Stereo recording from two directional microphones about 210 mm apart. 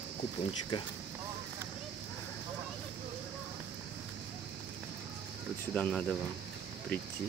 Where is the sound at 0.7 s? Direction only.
25° left (ahead or behind).